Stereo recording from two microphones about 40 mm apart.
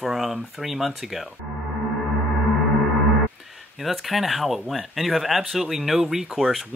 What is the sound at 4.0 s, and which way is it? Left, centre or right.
Speech, centre.